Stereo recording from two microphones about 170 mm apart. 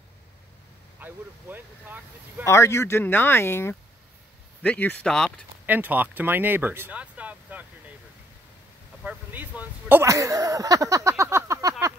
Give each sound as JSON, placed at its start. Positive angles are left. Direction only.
{"t": 1.0, "sound": "speech", "side_deg": -10}
{"t": 2.4, "sound": "speech", "side_deg": 15}
{"t": 5.7, "sound": "speech", "side_deg": -10}
{"t": 9.0, "sound": "speech", "side_deg": -10}